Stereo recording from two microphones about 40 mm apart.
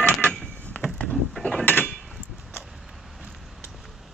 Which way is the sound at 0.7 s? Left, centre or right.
Left.